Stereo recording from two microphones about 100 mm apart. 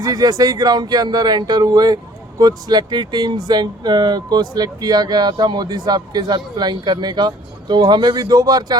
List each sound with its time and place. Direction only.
0.0 s speech: 40° right (ahead or behind)